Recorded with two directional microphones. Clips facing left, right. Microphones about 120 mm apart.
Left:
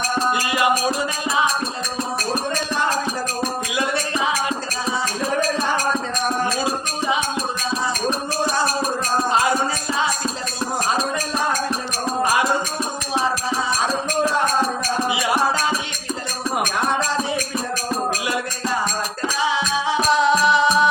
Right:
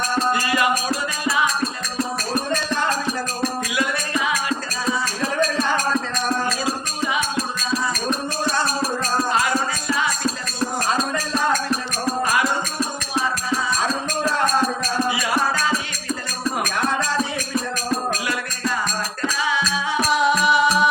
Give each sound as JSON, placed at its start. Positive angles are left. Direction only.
{"t": 0.3, "sound": "music", "side_deg": 20}
{"t": 3.8, "sound": "music", "side_deg": 25}
{"t": 6.7, "sound": "music", "side_deg": 25}
{"t": 12.2, "sound": "music", "side_deg": 25}
{"t": 15.0, "sound": "music", "side_deg": 25}
{"t": 19.4, "sound": "music", "side_deg": 25}